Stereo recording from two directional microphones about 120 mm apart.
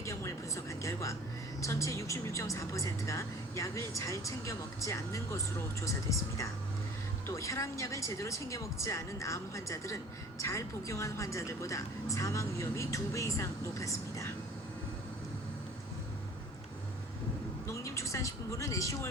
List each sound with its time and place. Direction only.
0.0 s a sound: 25° left (ahead or behind)
1.6 s speech: 25° left (ahead or behind)
17.7 s vehicle: 25° left (ahead or behind)